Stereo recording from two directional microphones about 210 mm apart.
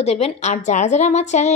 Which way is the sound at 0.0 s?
30° left (ahead or behind).